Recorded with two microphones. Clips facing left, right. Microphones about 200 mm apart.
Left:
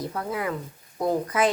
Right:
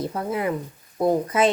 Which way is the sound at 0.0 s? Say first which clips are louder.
Right 4 dB; 25° right (ahead or behind).